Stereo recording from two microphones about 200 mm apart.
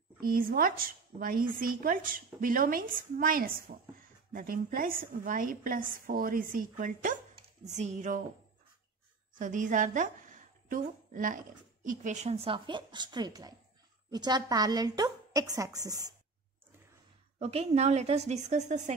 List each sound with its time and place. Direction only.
0.2 s a woman's voice: 45° right (ahead or behind)
9.3 s a woman's voice: 40° right (ahead or behind); by 16.2 s 20° right (ahead or behind)
17.4 s speech: 30° right (ahead or behind)